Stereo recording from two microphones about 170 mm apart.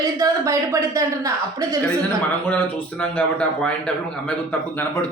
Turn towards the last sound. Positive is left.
turn(degrees=5)  # may be behind; listen again after turning